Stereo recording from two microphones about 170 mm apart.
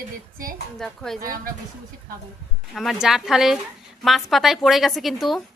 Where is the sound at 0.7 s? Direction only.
Centre (ahead or behind).